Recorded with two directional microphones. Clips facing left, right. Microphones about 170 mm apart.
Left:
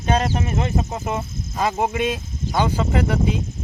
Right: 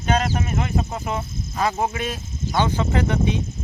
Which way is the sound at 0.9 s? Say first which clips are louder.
Left 1 dB; 10° left (ahead or behind).